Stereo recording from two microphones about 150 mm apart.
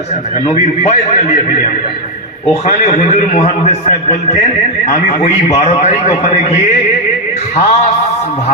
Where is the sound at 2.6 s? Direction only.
50° left (ahead or behind).